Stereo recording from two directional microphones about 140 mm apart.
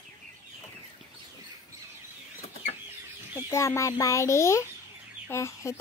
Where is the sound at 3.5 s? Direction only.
20° left (ahead or behind).